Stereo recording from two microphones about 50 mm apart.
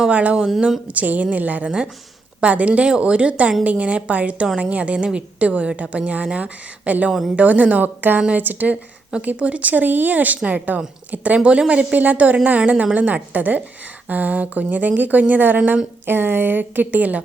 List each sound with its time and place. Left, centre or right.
0.1 s a woman's voice: right
0.3 s speech: centre
0.9 s a woman's voice: right
7.1 s a woman's voice: centre
7.3 s a woman's voice: right
16.0 s speech: right